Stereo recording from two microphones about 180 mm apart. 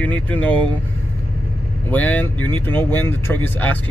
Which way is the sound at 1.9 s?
10° left (ahead or behind).